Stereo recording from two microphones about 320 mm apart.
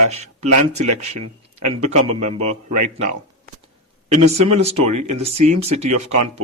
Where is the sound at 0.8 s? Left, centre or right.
Right.